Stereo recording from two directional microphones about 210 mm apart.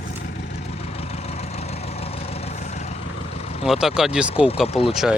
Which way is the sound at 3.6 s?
Centre (ahead or behind).